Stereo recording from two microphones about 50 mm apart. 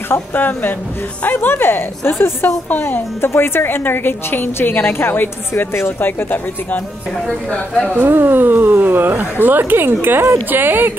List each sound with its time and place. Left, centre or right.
0.1 s a woman's voice: left
5.5 s speech: left
5.9 s a woman's voice: left
7.9 s speech: right